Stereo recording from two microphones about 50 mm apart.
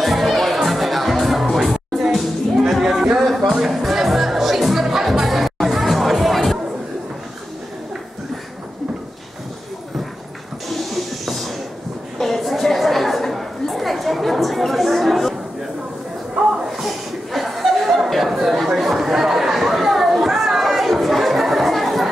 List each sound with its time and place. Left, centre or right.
0.0 s music: centre
10.7 s a sound: centre
12.2 s chatter: centre
16.6 s chuckle: centre
18.8 s chatter: centre